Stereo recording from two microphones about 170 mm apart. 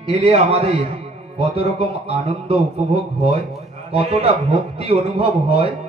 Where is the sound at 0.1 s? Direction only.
35° right (ahead or behind).